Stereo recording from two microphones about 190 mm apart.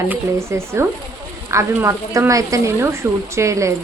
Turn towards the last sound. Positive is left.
turn(degrees=-15)  # may be behind; listen again after turning